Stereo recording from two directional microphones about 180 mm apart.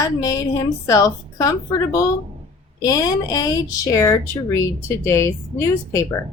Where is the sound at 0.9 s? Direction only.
20° left (ahead or behind).